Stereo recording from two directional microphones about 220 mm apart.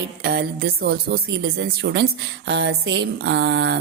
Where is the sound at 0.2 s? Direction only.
45° right (ahead or behind).